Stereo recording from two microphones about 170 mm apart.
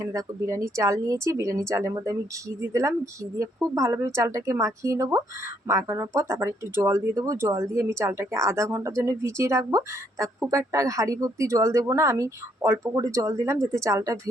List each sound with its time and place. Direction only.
0.0 s speech: 20° right (ahead or behind)